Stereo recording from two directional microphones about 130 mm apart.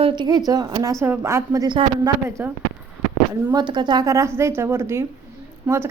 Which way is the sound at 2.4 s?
15° right (ahead or behind).